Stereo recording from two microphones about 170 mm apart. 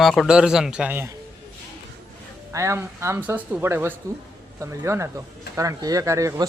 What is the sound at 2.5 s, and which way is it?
Speech, 15° right (ahead or behind).